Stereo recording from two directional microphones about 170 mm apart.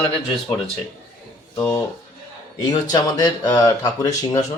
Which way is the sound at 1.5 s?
20° left (ahead or behind).